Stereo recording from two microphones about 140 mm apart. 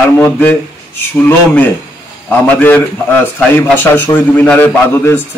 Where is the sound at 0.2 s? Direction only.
15° left (ahead or behind).